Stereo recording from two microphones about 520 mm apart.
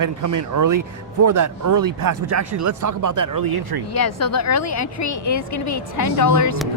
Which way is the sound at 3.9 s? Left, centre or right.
Left.